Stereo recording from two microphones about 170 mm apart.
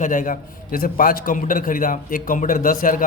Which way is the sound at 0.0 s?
50° left (ahead or behind).